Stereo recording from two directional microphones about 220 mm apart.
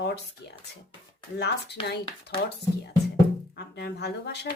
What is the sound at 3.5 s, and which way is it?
Speech, 50° left (ahead or behind).